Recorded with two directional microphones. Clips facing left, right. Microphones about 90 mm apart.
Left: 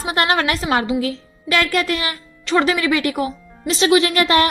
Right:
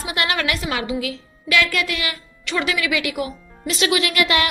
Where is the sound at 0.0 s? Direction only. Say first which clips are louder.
Left 5 dB; 35° left (ahead or behind).